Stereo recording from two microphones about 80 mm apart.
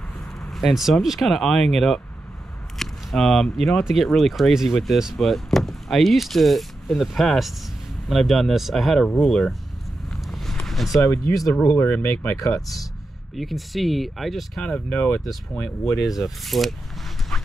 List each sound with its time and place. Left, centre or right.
0.5 s speech: centre
2.8 s a sound: centre
3.5 s speech: centre
10.2 s vehicle: centre
10.9 s speech: left
11.6 s speech: left
12.4 s speech: left
13.4 s speech: centre
14.6 s speech: centre
16.2 s speech: centre
17.3 s dog: centre